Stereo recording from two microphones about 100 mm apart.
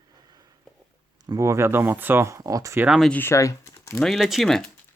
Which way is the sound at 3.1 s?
25° left (ahead or behind).